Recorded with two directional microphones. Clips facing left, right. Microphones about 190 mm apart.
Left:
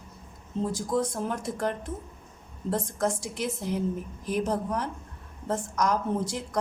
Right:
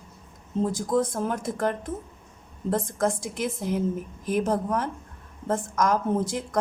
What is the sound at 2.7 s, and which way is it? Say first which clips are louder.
A woman's voice: right 3 dB; 50° right (ahead or behind).